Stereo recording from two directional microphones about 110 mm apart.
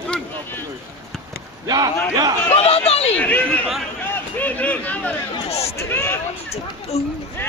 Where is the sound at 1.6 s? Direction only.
35° right (ahead or behind).